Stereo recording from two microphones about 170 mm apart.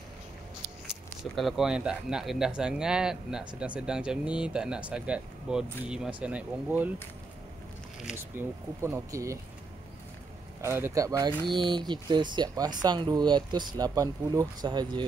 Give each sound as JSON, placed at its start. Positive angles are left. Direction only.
{"t": 1.3, "sound": "speech", "side_deg": 0}
{"t": 8.0, "sound": "speech", "side_deg": -10}
{"t": 10.6, "sound": "speech", "side_deg": -15}